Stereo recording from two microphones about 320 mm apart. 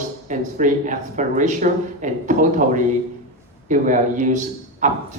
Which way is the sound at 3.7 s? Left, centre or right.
Right.